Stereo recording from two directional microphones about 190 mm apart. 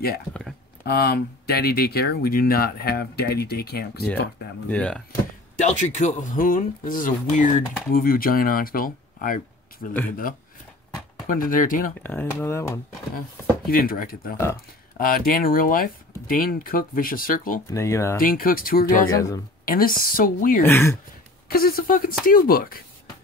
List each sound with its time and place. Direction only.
0.3 s speech: centre (ahead or behind)
0.8 s speech: 55° left (ahead or behind)
4.6 s speech: 5° left (ahead or behind)
5.6 s speech: 40° left (ahead or behind)
12.0 s speech: 10° left (ahead or behind)
13.7 s speech: 50° left (ahead or behind)
17.6 s speech: 15° left (ahead or behind)
18.2 s speech: 50° left (ahead or behind)
19.1 s speech: 15° left (ahead or behind)
19.6 s speech: 50° left (ahead or behind)
20.6 s speech: 10° left (ahead or behind)
21.5 s speech: 50° left (ahead or behind)